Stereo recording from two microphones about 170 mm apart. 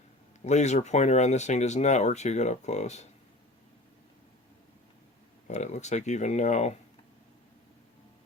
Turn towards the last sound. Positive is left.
turn(degrees=40)  # may be behind; listen again after turning